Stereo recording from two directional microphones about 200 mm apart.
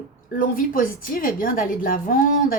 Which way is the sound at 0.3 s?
45° left (ahead or behind).